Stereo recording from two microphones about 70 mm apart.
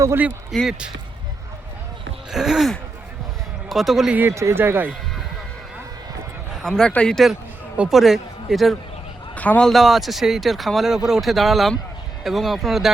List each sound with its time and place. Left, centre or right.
0.5 s speech: centre
2.3 s speech: centre
4.1 s speech: right
4.4 s speech: right
6.6 s speech: centre
7.9 s speech: centre
9.3 s a man's voice: left
9.6 s speech: centre